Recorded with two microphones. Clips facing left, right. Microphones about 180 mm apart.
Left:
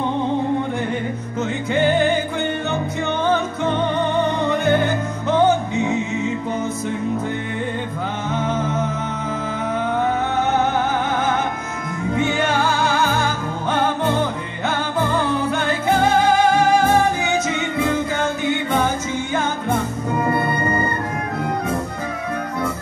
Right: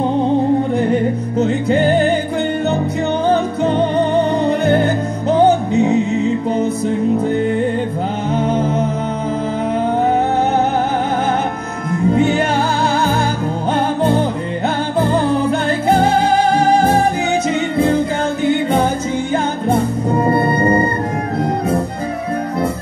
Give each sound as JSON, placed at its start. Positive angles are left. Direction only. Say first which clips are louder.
{"t": 1.4, "sound": "music", "louder": "right 5 dB", "side_deg": -35}
{"t": 3.3, "sound": "music", "louder": "right 5 dB", "side_deg": -35}
{"t": 8.3, "sound": "music", "louder": "right 6 dB", "side_deg": -35}
{"t": 12.1, "sound": "music", "louder": "right 5 dB", "side_deg": -35}
{"t": 15.0, "sound": "music", "louder": "right 6 dB", "side_deg": -35}
{"t": 19.3, "sound": "music", "louder": "right 5 dB", "side_deg": -35}